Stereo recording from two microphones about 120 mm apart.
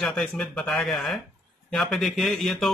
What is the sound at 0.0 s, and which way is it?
A man's voice, 5° left (ahead or behind).